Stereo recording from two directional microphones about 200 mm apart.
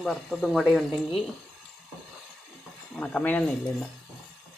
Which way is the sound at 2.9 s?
5° left (ahead or behind).